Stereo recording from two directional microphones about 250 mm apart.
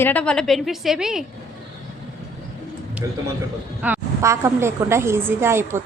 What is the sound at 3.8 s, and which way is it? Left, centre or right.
A woman's voice, centre.